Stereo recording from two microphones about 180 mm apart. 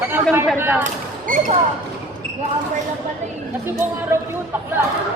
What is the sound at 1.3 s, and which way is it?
Speech, 50° right (ahead or behind).